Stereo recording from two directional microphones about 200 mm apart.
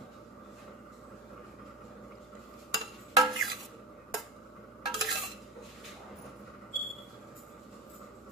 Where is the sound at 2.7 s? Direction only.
Centre (ahead or behind).